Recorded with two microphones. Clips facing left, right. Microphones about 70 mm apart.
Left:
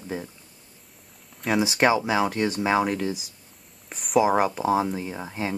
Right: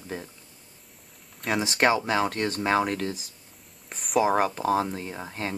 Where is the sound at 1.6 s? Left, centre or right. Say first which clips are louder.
Left 2 dB; centre.